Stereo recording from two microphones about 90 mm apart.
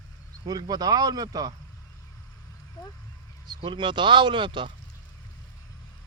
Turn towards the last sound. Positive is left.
turn(degrees=-65)  # may be behind; listen again after turning